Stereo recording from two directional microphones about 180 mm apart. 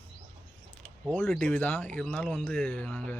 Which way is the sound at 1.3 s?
10° left (ahead or behind).